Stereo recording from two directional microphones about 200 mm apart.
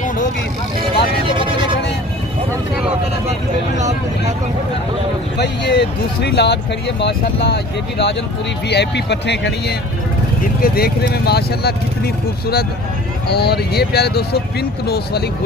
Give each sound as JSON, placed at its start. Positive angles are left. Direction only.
{"t": 5.4, "sound": "speech", "side_deg": 55}
{"t": 10.4, "sound": "speech", "side_deg": 50}
{"t": 13.3, "sound": "speech", "side_deg": 55}